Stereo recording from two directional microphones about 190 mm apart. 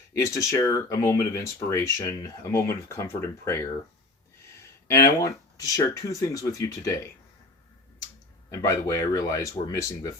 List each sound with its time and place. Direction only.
0.1 s speech: 15° left (ahead or behind)
4.6 s a sound: 15° left (ahead or behind)
5.1 s speech: 15° left (ahead or behind)
8.4 s speech: 15° left (ahead or behind)